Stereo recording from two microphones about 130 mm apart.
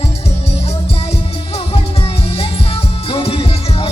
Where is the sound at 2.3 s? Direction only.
50° left (ahead or behind).